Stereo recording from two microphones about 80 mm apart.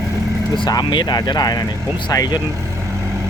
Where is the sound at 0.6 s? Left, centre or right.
Left.